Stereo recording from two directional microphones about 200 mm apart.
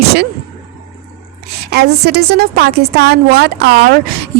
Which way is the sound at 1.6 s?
55° right (ahead or behind).